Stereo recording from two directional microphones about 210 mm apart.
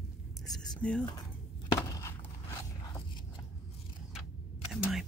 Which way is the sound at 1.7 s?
15° left (ahead or behind).